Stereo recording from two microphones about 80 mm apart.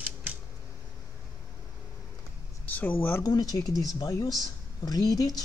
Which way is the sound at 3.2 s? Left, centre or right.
Left.